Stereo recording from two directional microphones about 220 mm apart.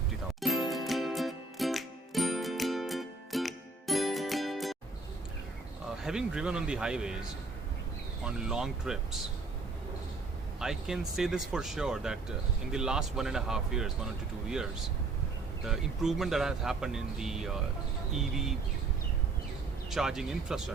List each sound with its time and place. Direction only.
0.3 s music: centre (ahead or behind)
6.0 s speech: 5° right (ahead or behind)
10.6 s speech: centre (ahead or behind)
15.6 s speech: centre (ahead or behind)
19.9 s speech: centre (ahead or behind)